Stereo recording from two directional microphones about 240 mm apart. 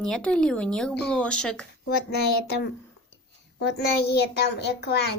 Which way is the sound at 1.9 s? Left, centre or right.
Left.